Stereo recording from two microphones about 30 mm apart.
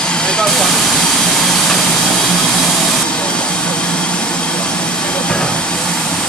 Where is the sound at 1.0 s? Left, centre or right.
Centre.